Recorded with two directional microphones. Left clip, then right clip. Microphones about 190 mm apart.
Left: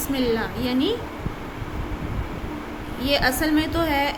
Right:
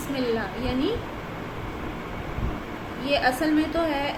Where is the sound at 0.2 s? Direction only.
45° left (ahead or behind).